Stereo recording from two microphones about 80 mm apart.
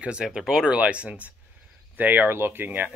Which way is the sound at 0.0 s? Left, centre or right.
Centre.